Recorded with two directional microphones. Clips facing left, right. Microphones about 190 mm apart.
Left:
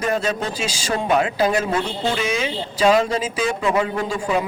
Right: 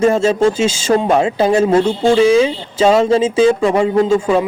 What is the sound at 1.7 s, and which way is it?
Speech, 45° right (ahead or behind).